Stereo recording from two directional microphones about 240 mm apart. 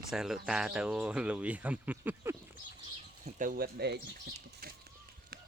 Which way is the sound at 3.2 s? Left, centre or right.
Right.